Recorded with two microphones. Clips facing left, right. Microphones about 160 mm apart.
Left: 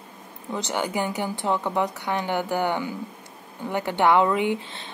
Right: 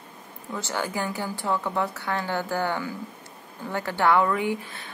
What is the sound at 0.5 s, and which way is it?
Speech, 20° left (ahead or behind).